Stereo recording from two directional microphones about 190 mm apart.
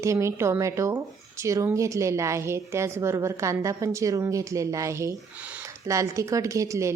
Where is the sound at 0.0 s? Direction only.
15° right (ahead or behind).